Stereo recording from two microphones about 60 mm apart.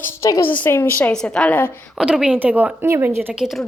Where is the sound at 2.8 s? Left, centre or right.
Right.